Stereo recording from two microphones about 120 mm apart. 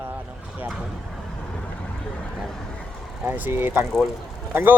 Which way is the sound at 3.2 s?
15° right (ahead or behind).